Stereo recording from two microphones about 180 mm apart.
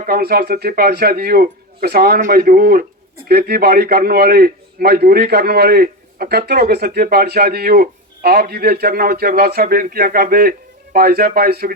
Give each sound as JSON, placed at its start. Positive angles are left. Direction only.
{"t": 0.0, "sound": "a man's voice", "side_deg": -55}